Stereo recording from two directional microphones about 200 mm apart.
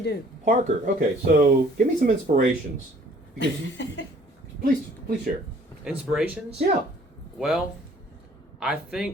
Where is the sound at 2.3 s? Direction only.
40° right (ahead or behind).